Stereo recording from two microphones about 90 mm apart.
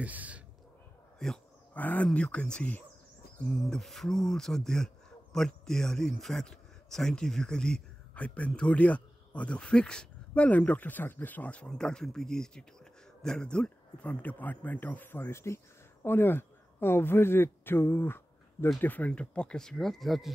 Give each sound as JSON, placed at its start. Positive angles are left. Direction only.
{"t": 0.0, "sound": "a sound", "side_deg": -15}
{"t": 1.2, "sound": "speech", "side_deg": 5}
{"t": 1.7, "sound": "speech", "side_deg": 15}